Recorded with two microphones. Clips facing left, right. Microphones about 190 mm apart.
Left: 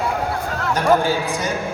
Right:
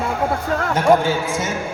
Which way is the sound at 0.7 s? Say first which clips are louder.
Right 1 dB; 25° right (ahead or behind).